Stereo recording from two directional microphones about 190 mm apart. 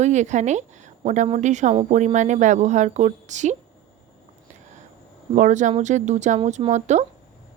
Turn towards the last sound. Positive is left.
turn(degrees=-40)  # may be behind; listen again after turning